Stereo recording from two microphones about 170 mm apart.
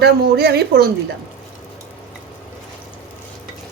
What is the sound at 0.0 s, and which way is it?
Speech, 70° right (ahead or behind).